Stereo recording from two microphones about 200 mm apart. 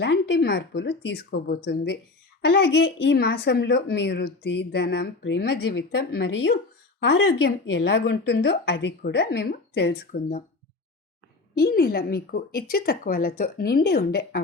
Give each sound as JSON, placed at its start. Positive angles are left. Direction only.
{"t": 0.0, "sound": "a woman's voice", "side_deg": 55}
{"t": 11.5, "sound": "a woman's voice", "side_deg": 50}